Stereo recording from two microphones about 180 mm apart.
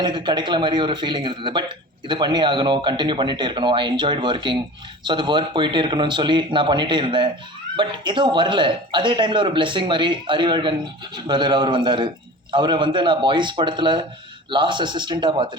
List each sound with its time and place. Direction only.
0.0 s a man's voice: 25° right (ahead or behind)